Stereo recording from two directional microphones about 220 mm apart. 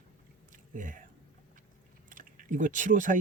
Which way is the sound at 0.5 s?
35° right (ahead or behind).